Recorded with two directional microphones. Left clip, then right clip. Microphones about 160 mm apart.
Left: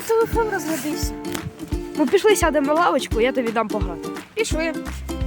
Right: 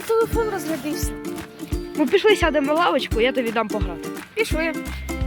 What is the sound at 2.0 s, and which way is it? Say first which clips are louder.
Speech: even; centre (ahead or behind).